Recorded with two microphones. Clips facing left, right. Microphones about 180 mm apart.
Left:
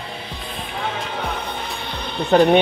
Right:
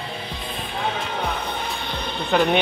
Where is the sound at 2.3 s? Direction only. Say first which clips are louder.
Left 6 dB; 40° left (ahead or behind).